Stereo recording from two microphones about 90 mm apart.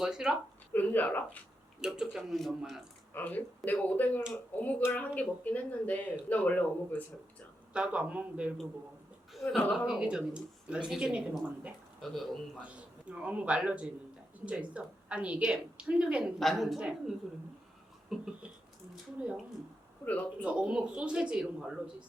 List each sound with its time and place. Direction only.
0.0 s speech: 5° right (ahead or behind)
0.7 s speech: 20° left (ahead or behind)
1.8 s speech: 5° right (ahead or behind)
3.1 s speech: 20° left (ahead or behind)
7.7 s speech: 10° right (ahead or behind)
9.3 s a sound: centre (ahead or behind)
9.7 s speech: 5° right (ahead or behind)
12.1 s speech: 5° left (ahead or behind)
12.6 s speech: 15° right (ahead or behind)
16.4 s speech: centre (ahead or behind)
18.1 s speech: 5° right (ahead or behind)
20.4 s speech: 10° right (ahead or behind)